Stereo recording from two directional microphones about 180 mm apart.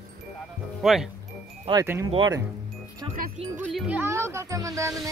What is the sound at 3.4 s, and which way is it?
Speech, 35° right (ahead or behind).